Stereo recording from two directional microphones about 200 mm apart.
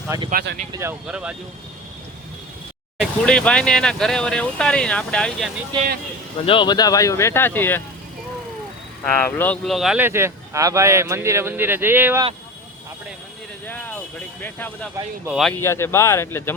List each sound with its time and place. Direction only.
0.3 s speech: 45° right (ahead or behind)
0.7 s speech: 15° right (ahead or behind)
3.0 s speech: 5° left (ahead or behind)
6.4 s speech: 25° left (ahead or behind)
9.1 s speech: 10° left (ahead or behind); by 12.2 s 10° right (ahead or behind)
13.7 s vehicle: 10° left (ahead or behind)
15.3 s speech: centre (ahead or behind)
15.5 s speech: 15° left (ahead or behind)